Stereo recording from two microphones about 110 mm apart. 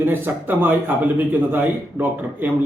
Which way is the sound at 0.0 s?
20° right (ahead or behind).